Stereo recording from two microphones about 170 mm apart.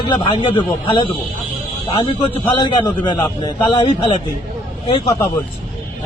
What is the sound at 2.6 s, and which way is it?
A man's voice, 25° left (ahead or behind).